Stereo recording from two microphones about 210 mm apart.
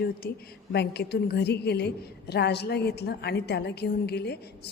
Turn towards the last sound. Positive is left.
turn(degrees=50)  # may be behind; listen again after turning